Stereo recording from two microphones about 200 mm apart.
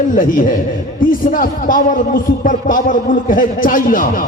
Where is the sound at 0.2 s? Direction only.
45° left (ahead or behind).